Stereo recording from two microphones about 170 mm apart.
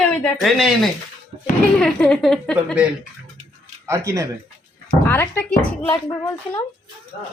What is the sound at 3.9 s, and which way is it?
Speech, 20° right (ahead or behind).